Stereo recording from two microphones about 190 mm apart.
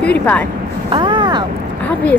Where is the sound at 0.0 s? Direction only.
5° left (ahead or behind).